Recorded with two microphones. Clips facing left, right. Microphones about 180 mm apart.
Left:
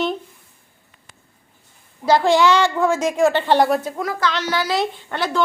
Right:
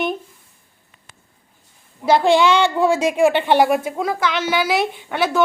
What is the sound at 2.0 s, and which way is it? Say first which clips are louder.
A woman's voice: right 1 dB; 20° right (ahead or behind).